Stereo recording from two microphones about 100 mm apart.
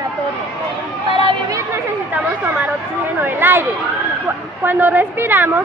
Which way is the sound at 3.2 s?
20° right (ahead or behind).